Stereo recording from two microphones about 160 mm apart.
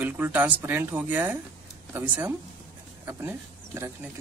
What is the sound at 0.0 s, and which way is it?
Speech, 10° right (ahead or behind).